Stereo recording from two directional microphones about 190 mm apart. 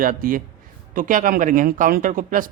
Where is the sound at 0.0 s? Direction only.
45° right (ahead or behind).